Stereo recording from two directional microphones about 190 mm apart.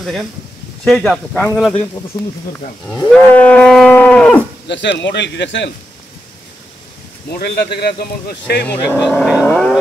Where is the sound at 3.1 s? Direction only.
5° left (ahead or behind).